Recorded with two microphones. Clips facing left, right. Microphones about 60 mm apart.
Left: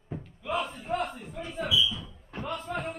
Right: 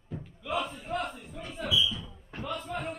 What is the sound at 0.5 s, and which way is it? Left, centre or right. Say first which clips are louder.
Battle cry: left 1 dB; centre.